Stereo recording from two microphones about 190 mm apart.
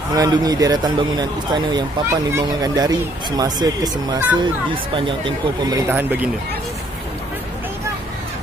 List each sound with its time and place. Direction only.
0.1 s a man's voice: 20° right (ahead or behind)